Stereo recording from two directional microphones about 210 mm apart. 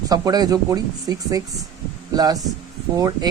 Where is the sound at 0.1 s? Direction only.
20° right (ahead or behind).